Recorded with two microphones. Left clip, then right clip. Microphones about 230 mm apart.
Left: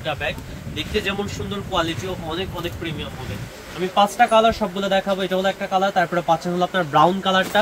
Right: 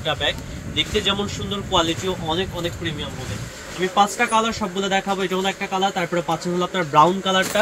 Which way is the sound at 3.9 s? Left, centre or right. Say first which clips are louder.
Left 3 dB; left.